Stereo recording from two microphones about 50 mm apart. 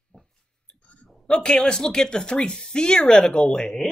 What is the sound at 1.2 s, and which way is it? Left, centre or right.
Speech, centre.